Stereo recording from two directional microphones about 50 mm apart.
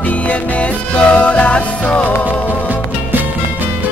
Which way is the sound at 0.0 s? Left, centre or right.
Left.